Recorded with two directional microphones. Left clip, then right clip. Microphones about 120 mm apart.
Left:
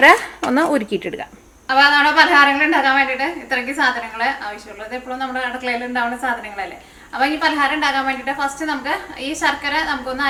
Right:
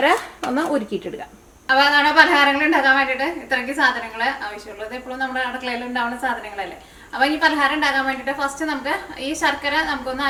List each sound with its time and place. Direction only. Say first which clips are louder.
0.0 s speech: left 7 dB; 40° left (ahead or behind)
1.6 s a woman's voice: left 2 dB; centre (ahead or behind)